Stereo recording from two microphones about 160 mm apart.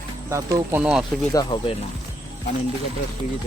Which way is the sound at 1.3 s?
30° left (ahead or behind).